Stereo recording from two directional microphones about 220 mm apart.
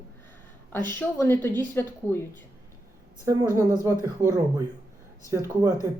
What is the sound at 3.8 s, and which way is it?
Speech, 15° right (ahead or behind).